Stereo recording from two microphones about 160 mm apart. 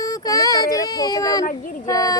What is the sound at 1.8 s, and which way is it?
Carnatic music, 20° left (ahead or behind).